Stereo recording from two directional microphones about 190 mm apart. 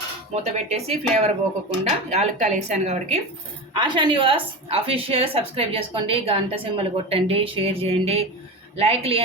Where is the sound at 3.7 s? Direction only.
25° right (ahead or behind).